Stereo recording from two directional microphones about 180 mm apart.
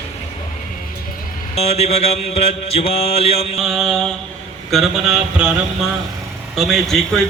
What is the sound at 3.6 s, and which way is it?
A man's voice, centre (ahead or behind).